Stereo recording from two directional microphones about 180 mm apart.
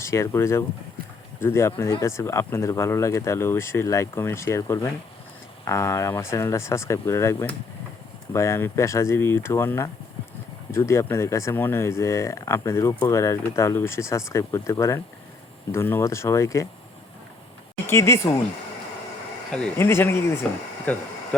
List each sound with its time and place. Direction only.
0.0 s speech: 15° left (ahead or behind)
17.8 s speech: 15° left (ahead or behind)
19.5 s speech: 5° left (ahead or behind)